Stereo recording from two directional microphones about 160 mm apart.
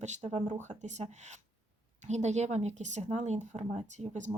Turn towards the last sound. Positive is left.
turn(degrees=-45)  # may be behind; listen again after turning